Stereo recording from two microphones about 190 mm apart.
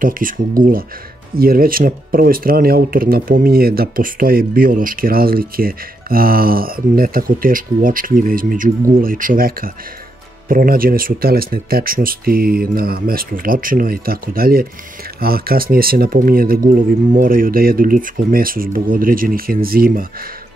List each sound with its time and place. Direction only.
0.0 s speech: 45° right (ahead or behind)